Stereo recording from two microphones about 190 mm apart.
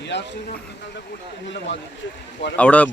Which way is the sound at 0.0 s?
70° left (ahead or behind).